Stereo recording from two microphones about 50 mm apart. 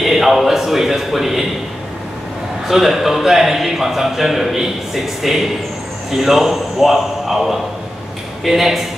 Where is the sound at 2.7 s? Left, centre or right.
Centre.